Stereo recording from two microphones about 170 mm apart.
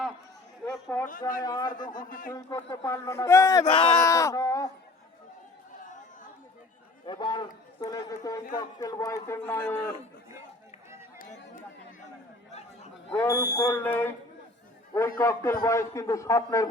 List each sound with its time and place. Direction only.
0.6 s a sound: 15° left (ahead or behind)
1.4 s a man's voice: 25° left (ahead or behind)
1.7 s speech: 50° left (ahead or behind)
2.3 s speech: 20° left (ahead or behind)
3.7 s speech: 30° left (ahead or behind)
3.9 s a man's voice: 20° left (ahead or behind)
7.0 s a man's voice: 25° left (ahead or behind)
12.5 s chatter: 40° left (ahead or behind)
13.3 s speech: 10° right (ahead or behind)
13.6 s speech: 15° left (ahead or behind)
15.2 s speech: 15° left (ahead or behind)